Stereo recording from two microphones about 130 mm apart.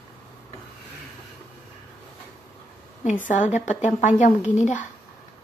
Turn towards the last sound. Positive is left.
turn(degrees=65)  # may be behind; listen again after turning